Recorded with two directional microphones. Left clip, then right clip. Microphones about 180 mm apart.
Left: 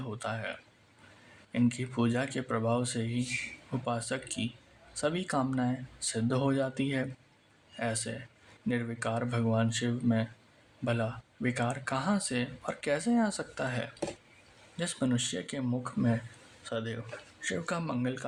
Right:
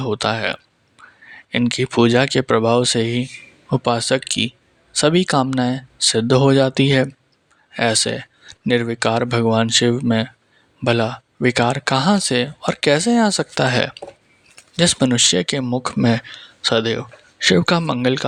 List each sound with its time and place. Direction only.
0.0 s speech: 50° right (ahead or behind)
1.5 s speech: 50° right (ahead or behind)
16.6 s speech: 50° right (ahead or behind)